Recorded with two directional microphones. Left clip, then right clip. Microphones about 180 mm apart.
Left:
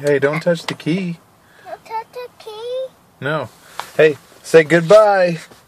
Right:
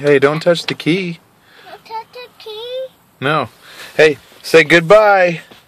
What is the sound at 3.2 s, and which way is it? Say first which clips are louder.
Speech: right 5 dB; 45° right (ahead or behind).